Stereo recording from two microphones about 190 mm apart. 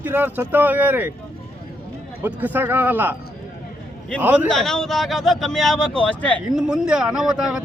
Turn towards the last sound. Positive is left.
turn(degrees=-5)  # may be behind; listen again after turning